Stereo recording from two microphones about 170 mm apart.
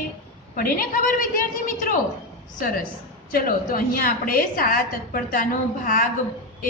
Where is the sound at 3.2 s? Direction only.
60° left (ahead or behind).